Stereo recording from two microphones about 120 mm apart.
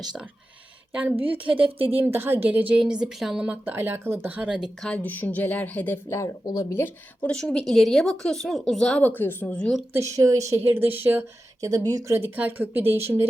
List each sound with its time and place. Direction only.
0.9 s a woman's voice: 15° right (ahead or behind)
1.8 s speech: 50° right (ahead or behind)
2.0 s a woman's voice: 20° right (ahead or behind)
4.9 s speech: 15° left (ahead or behind)
7.2 s a woman's voice: 10° left (ahead or behind)
9.9 s speech: 25° right (ahead or behind)
11.6 s speech: 30° right (ahead or behind)